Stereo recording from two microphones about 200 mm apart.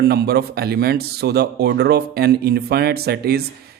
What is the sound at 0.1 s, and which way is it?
Speech, 55° right (ahead or behind).